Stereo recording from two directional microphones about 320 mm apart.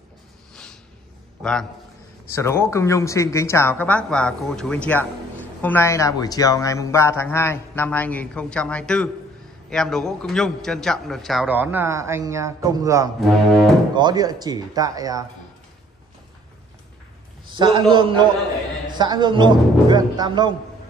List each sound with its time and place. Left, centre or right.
1.4 s a man's voice: centre
17.5 s speech: centre